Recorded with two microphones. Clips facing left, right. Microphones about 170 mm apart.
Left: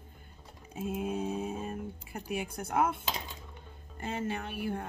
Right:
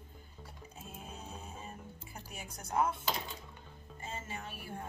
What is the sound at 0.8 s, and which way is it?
Speech, 75° left (ahead or behind).